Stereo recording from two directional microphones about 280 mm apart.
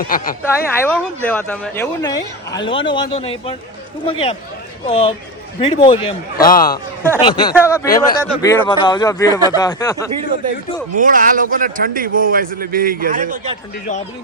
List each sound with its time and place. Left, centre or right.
0.4 s a man's voice: centre
6.3 s a man's voice: left
7.2 s speech: centre
10.9 s a man's voice: right